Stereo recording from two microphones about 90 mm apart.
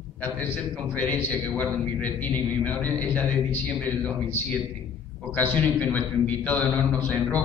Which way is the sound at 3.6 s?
15° left (ahead or behind).